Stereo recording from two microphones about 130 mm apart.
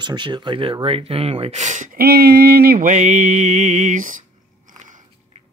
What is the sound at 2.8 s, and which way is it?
Speech, 80° right.